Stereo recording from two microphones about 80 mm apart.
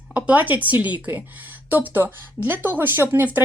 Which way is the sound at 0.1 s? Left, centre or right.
Centre.